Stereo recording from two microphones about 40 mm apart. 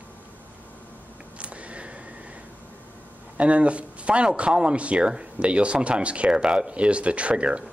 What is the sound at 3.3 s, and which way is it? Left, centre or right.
Speech, right.